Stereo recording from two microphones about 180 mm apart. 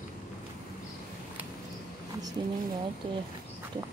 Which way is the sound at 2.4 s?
25° right (ahead or behind).